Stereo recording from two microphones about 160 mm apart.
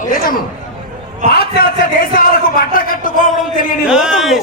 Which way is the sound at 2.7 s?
60° left (ahead or behind).